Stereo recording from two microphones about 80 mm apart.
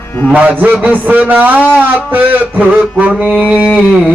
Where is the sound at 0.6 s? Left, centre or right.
Right; by 4.0 s centre.